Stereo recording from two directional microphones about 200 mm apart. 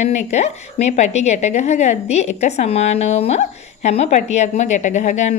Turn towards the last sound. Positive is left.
turn(degrees=35)  # may be behind; listen again after turning